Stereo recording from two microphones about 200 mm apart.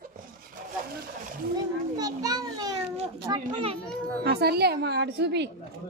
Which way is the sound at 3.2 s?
25° right (ahead or behind).